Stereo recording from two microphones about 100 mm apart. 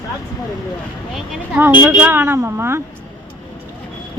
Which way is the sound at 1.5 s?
20° right (ahead or behind).